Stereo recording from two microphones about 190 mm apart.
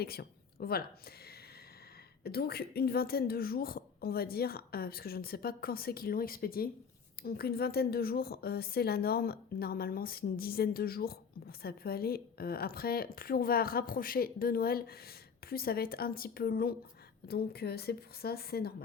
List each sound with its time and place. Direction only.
0.0 s a woman's voice: 55° left (ahead or behind)